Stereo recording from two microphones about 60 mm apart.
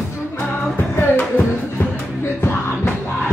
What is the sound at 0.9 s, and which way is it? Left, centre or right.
Music, left.